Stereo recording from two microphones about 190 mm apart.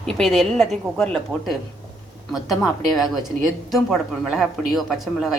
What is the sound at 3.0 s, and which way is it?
Speech, centre (ahead or behind).